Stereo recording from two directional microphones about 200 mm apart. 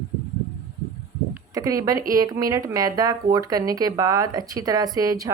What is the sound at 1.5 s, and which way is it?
Speech, 15° right (ahead or behind).